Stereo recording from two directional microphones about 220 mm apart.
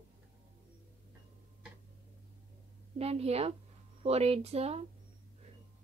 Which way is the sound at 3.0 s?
30° right (ahead or behind).